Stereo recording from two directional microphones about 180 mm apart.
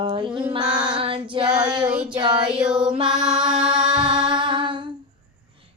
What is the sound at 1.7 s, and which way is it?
Child singing, 5° right (ahead or behind).